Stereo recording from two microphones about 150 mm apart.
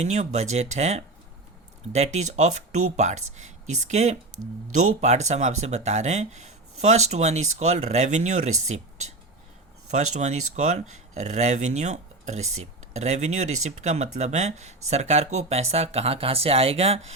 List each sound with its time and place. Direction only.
0.0 s speech: 50° right (ahead or behind)
9.9 s speech: 50° right (ahead or behind)